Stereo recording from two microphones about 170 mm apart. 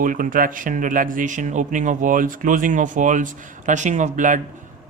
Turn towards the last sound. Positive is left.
turn(degrees=-50)  # may be behind; listen again after turning